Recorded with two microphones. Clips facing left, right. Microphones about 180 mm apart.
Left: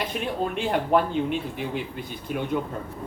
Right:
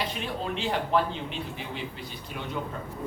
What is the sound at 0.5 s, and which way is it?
Speech, 50° left (ahead or behind).